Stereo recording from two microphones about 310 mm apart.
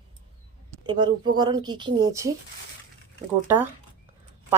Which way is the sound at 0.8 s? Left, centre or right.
Centre.